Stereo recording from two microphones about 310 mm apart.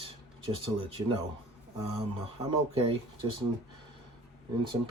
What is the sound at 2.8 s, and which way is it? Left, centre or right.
Speech, centre.